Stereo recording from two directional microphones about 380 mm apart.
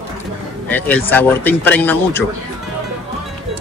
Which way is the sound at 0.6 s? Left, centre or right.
Centre.